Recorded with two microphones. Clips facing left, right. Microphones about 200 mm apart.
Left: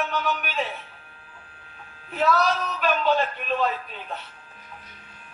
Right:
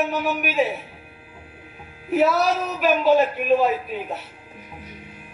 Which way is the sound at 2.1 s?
10° right (ahead or behind).